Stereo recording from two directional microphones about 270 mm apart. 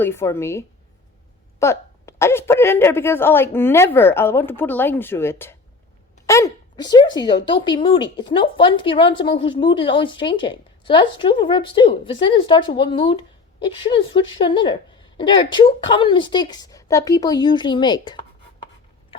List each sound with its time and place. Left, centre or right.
0.0 s a woman's voice: centre